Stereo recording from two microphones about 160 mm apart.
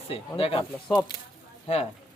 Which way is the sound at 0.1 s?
35° left (ahead or behind).